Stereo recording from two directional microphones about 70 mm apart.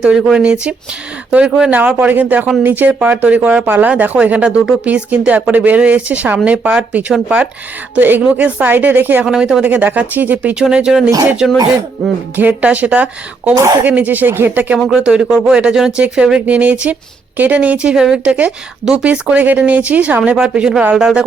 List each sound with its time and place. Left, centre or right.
0.0 s speech: centre
1.7 s speech: right
9.2 s speech: centre
9.6 s speech: right
12.0 s speech: centre
12.4 s speech: right
14.8 s speech: centre